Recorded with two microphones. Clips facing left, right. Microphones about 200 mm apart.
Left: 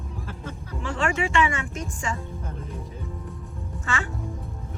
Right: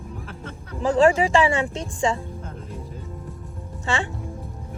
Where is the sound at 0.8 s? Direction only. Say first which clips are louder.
Right 9 dB; 35° right (ahead or behind).